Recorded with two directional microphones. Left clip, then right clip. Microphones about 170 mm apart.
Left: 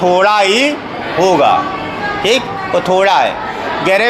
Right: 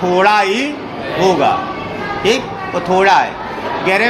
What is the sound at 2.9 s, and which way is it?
Speech, 30° left (ahead or behind).